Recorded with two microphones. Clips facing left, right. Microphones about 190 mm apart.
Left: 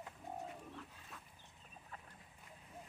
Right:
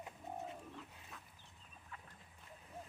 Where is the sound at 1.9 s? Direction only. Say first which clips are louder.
Left 1 dB; 35° left (ahead or behind).